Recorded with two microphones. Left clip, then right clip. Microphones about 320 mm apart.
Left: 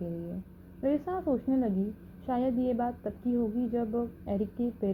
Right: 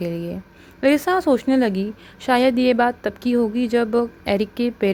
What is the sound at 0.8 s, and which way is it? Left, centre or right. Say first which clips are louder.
A woman's voice: right 13 dB; right.